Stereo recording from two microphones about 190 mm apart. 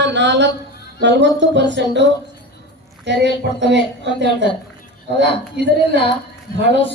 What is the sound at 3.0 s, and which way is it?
Speech, 65° right (ahead or behind).